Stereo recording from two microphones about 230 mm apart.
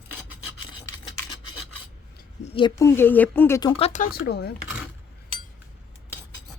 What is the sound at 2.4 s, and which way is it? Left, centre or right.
Speech, left.